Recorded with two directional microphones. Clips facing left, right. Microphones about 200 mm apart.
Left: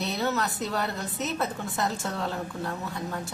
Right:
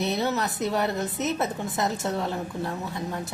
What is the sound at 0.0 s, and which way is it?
A woman's voice, 20° right (ahead or behind).